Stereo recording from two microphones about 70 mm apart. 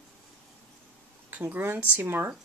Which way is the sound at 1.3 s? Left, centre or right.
Right.